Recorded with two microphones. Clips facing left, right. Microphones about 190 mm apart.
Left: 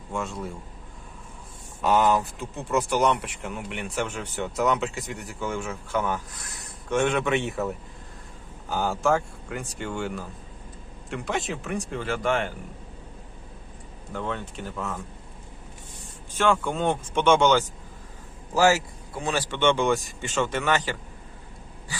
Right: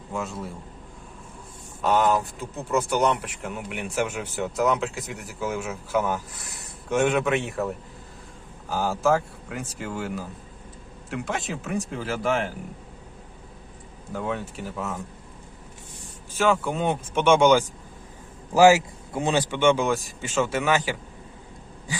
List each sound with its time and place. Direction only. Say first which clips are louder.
0.1 s speech: even; centre (ahead or behind)
1.8 s speech: even; centre (ahead or behind)
14.1 s speech: right 2 dB; 5° right (ahead or behind)
16.4 s a man's voice: right 1 dB; 5° right (ahead or behind); by 19.5 s 20° right (ahead or behind)
19.5 s speech: left 2 dB; 10° right (ahead or behind)